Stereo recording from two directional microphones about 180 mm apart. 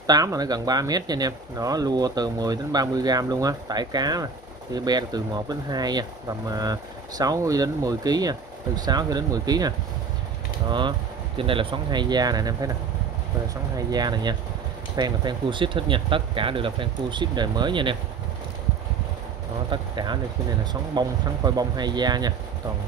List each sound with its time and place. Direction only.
0.0 s speech: 20° right (ahead or behind)
13.7 s speech: 20° right (ahead or behind)
19.7 s speech: 25° right (ahead or behind)